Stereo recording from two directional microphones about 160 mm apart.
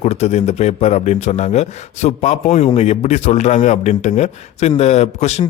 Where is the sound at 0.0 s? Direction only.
45° left (ahead or behind).